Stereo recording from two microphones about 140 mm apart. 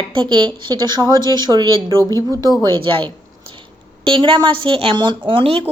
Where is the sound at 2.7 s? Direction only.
35° right (ahead or behind).